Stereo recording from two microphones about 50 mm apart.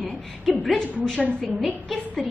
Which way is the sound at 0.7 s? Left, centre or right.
Centre.